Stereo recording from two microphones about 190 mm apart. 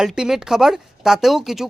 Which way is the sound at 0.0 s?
Centre (ahead or behind).